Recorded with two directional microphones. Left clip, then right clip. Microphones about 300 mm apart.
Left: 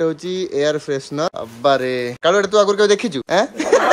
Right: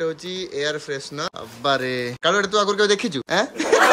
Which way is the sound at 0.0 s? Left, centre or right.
Centre.